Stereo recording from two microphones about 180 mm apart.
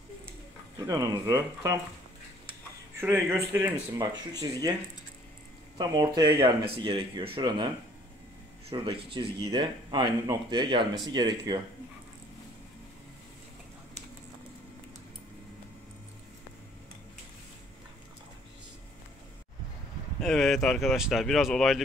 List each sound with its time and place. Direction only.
0.7 s speech: 20° right (ahead or behind)
3.0 s speech: 15° right (ahead or behind)
5.8 s speech: 20° right (ahead or behind)
20.2 s speech: centre (ahead or behind)